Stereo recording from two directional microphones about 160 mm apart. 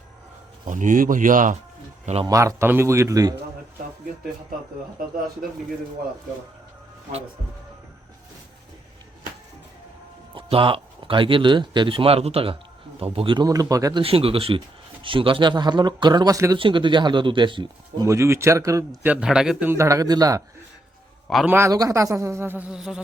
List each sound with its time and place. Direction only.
0.7 s speech: 55° right (ahead or behind)
2.2 s speech: 20° right (ahead or behind)
10.3 s speech: 35° right (ahead or behind)
14.0 s speech: 35° right (ahead or behind)
18.0 s speech: 20° right (ahead or behind)
19.0 s a man's voice: 5° right (ahead or behind); by 20.4 s 25° right (ahead or behind)
21.4 s a man's voice: 15° right (ahead or behind)